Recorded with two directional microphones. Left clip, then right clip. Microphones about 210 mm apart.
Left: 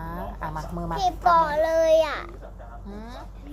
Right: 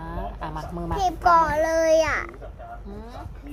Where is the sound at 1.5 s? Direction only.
15° right (ahead or behind).